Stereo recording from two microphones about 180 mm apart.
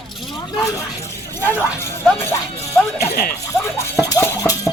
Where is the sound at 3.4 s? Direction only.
15° left (ahead or behind).